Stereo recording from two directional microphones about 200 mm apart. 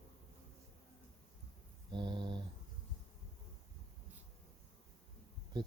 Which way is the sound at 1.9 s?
20° right (ahead or behind).